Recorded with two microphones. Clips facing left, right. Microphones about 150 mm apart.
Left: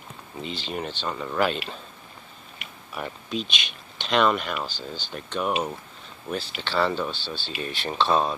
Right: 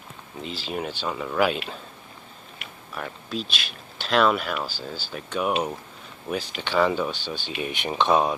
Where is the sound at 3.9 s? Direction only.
Centre (ahead or behind).